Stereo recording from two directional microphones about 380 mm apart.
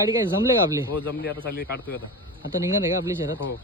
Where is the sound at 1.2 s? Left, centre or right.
Left.